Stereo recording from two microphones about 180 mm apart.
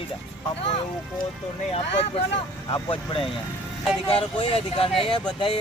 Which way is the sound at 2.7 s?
30° left (ahead or behind).